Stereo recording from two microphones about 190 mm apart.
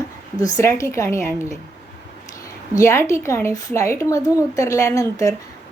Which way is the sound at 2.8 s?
15° left (ahead or behind).